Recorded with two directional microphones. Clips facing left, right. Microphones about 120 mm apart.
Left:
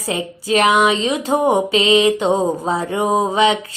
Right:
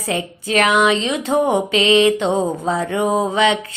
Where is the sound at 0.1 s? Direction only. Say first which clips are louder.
Left 2 dB; 30° left (ahead or behind).